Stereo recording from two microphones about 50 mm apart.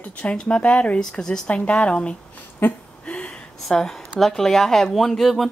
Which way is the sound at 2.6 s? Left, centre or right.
Left.